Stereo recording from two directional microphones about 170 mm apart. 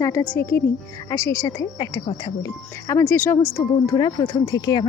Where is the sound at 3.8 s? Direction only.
25° left (ahead or behind).